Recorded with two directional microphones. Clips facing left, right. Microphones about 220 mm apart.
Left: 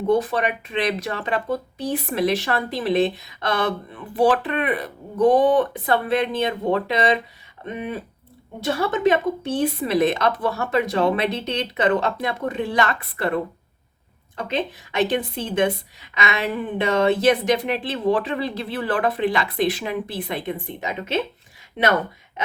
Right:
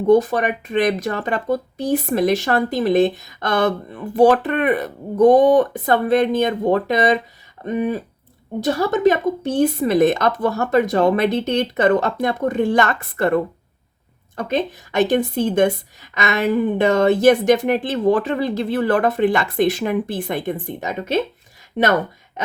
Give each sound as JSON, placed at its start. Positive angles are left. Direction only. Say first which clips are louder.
{"t": 0.1, "sound": "speech", "louder": "right 6 dB", "side_deg": -45}
{"t": 22.4, "sound": "speech", "louder": "right 1 dB", "side_deg": -45}